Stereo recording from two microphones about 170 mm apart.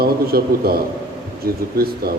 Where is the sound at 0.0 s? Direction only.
65° right (ahead or behind).